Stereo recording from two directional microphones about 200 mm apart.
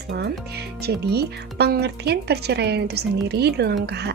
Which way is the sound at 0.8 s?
55° right (ahead or behind).